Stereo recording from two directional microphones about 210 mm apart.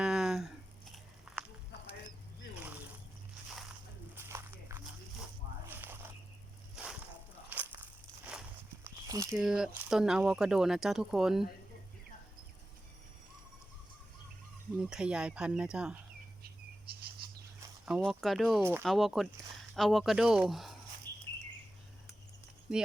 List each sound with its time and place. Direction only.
0.0 s a sound: 5° right (ahead or behind)
4.1 s walk: 10° right (ahead or behind)
5.6 s a sound: 10° right (ahead or behind)
7.5 s walk: 10° right (ahead or behind)
9.0 s biting: 15° right (ahead or behind)
9.4 s speech: centre (ahead or behind)
14.8 s speech: 5° right (ahead or behind)
17.8 s speech: 5° right (ahead or behind)